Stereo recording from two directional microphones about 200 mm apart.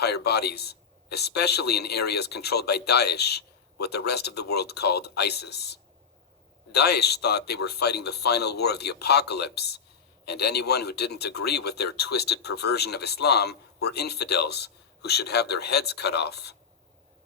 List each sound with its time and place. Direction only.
0.0 s a man's voice: 55° left (ahead or behind)